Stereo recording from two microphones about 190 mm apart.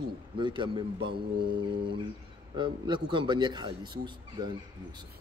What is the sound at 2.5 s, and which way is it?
A man's voice, 25° right (ahead or behind).